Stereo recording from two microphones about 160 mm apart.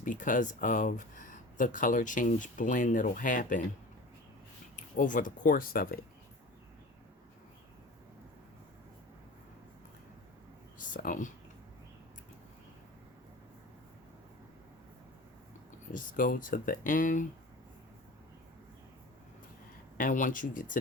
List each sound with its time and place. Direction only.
0.0 s speech: 55° left (ahead or behind)
4.8 s speech: 55° left (ahead or behind)
10.8 s speech: 55° left (ahead or behind)
15.9 s speech: 55° left (ahead or behind)
20.0 s speech: 55° left (ahead or behind)